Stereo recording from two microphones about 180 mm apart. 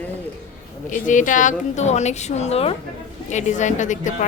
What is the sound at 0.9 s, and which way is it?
A woman's voice, 45° left (ahead or behind).